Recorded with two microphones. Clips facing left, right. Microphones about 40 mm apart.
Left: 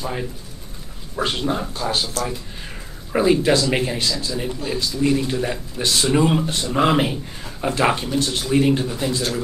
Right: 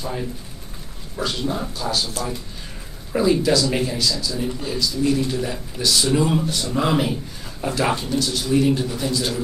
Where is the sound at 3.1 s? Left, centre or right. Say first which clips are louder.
Left 2 dB; left.